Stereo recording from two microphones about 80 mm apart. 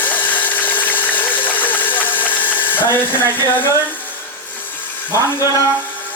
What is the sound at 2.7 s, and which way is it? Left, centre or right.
Speech, left.